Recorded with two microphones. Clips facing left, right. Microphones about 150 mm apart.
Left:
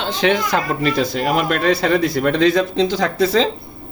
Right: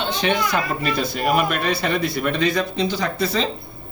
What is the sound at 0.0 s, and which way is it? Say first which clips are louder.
Speech: left 3 dB; 90° left.